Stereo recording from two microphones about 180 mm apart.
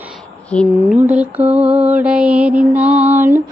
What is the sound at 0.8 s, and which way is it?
Mantra, 10° right (ahead or behind).